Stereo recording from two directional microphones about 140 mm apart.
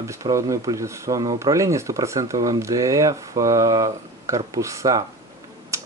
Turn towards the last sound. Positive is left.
turn(degrees=-20)  # may be behind; listen again after turning